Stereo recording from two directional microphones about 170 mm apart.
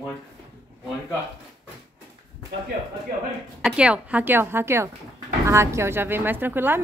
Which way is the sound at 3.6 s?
5° right (ahead or behind).